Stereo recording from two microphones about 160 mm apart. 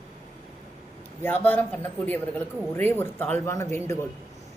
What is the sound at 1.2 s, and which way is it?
Speech, 10° left (ahead or behind).